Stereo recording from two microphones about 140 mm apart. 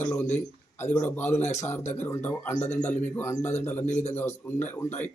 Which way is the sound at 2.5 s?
55° left (ahead or behind).